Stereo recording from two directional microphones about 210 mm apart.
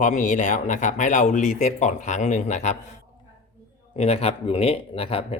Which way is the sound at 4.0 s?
30° left (ahead or behind).